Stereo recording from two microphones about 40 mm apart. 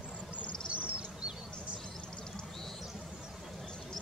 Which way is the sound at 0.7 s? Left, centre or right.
Right.